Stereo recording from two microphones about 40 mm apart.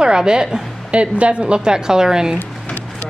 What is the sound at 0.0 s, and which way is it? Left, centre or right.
Speech, right.